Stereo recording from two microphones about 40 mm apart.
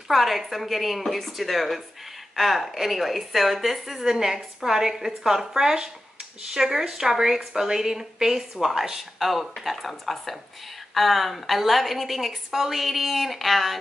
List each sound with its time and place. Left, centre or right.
0.1 s a woman's voice: centre